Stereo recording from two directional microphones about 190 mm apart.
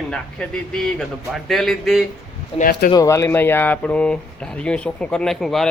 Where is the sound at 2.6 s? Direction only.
45° left (ahead or behind).